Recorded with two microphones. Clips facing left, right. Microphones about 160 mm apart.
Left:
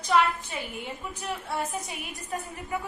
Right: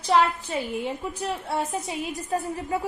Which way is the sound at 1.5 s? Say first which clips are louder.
Right 2 dB; 25° right (ahead or behind).